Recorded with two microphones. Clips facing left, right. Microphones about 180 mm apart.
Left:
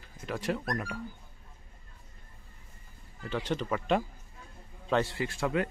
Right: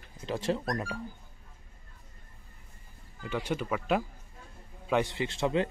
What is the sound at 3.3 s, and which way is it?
Speech, 10° right (ahead or behind).